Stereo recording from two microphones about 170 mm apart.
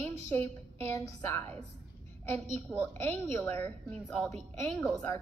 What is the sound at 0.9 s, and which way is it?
Speech, 20° left (ahead or behind).